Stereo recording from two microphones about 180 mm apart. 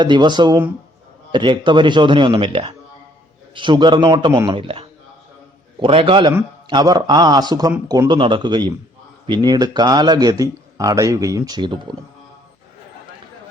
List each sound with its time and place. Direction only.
0.0 s speech: 25° right (ahead or behind)